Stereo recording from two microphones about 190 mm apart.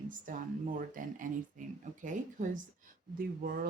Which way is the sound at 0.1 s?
45° right (ahead or behind).